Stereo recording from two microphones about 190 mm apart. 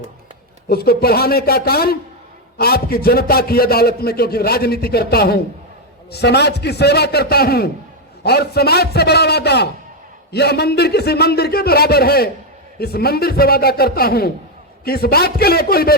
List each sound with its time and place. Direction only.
0.7 s a man's voice: 55° left (ahead or behind)